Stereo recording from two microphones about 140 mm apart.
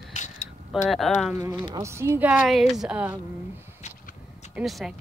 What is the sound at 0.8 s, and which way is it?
Speech, centre (ahead or behind).